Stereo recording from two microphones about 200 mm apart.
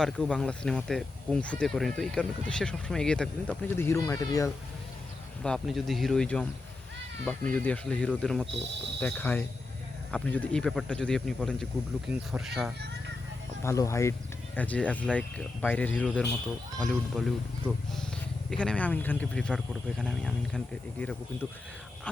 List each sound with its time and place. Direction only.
0.0 s speech: 5° left (ahead or behind)
5.4 s speech: centre (ahead or behind)
12.8 s music: 55° right (ahead or behind)
13.6 s speech: 15° left (ahead or behind)
18.5 s speech: 5° left (ahead or behind)